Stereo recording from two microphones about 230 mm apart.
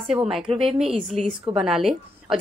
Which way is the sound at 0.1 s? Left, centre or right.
Centre.